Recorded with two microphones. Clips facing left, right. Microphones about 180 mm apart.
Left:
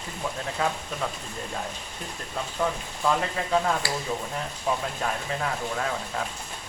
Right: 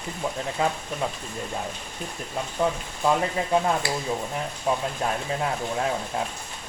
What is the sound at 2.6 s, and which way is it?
Speech, 15° right (ahead or behind).